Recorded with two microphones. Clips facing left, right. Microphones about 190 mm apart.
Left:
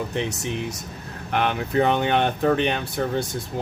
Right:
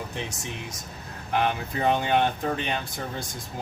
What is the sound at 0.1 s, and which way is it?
Speech, 65° left (ahead or behind).